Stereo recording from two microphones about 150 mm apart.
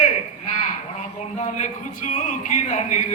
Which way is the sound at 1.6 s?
50° left (ahead or behind).